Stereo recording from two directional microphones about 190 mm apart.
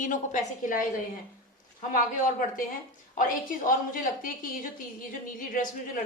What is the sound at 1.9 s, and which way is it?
A woman's voice, 45° left (ahead or behind).